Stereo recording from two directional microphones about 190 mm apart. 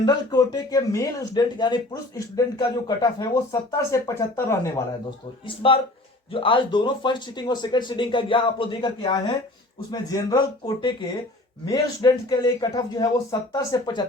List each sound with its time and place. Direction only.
0.0 s speech: 20° left (ahead or behind)
5.5 s speech: 30° left (ahead or behind)